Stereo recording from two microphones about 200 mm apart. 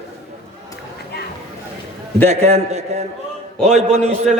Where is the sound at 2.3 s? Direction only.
35° right (ahead or behind).